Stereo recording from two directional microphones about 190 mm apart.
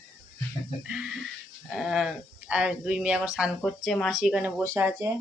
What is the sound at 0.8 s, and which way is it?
Speech, 5° right (ahead or behind).